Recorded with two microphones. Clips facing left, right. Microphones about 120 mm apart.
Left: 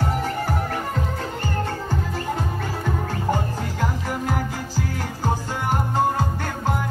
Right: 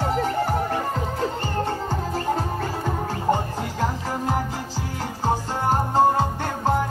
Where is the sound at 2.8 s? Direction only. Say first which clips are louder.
Right 1 dB; 25° right (ahead or behind).